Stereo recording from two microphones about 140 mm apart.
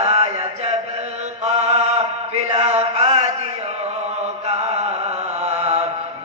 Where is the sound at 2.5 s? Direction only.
45° right (ahead or behind).